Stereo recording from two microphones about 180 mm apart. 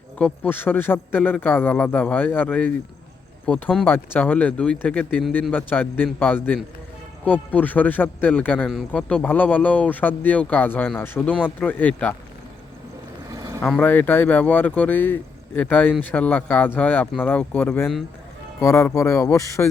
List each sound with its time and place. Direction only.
0.2 s a man's voice: 10° left (ahead or behind)
13.6 s a man's voice: 5° left (ahead or behind)